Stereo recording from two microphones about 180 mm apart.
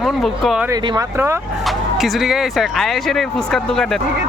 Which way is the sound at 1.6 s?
Centre (ahead or behind).